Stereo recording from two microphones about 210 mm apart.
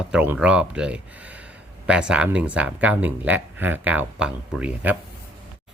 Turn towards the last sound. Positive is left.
turn(degrees=-5)  # may be behind; listen again after turning